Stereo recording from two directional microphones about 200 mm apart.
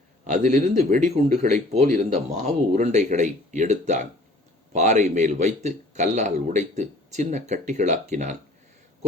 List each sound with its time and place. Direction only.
0.3 s speech: 35° right (ahead or behind)